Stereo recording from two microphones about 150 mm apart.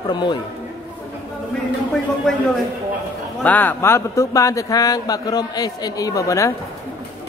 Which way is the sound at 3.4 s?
10° left (ahead or behind).